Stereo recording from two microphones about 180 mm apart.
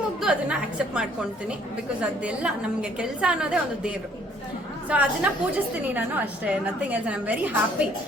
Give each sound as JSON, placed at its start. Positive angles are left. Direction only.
{"t": 0.2, "sound": "a woman's voice", "side_deg": -5}